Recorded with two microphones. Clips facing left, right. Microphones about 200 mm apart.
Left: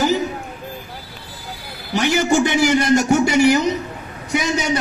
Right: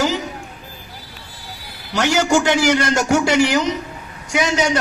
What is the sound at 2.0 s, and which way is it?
A man's voice, 75° right (ahead or behind).